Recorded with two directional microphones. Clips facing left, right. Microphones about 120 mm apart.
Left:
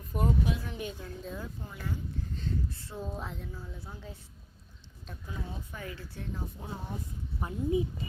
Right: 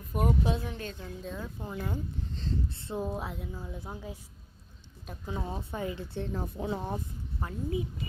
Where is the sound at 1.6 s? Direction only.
20° right (ahead or behind).